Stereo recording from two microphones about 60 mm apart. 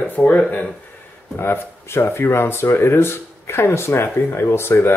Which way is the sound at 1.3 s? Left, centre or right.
Left.